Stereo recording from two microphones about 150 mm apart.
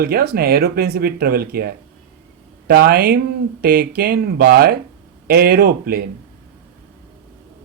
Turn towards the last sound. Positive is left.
turn(degrees=-90)